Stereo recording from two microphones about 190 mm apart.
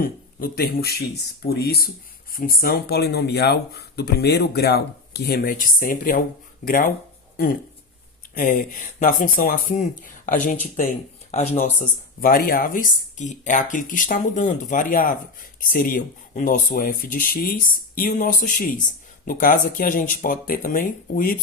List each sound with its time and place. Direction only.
0.0 s speech: 50° left (ahead or behind)
8.4 s speech: 40° left (ahead or behind)
12.2 s speech: 50° left (ahead or behind)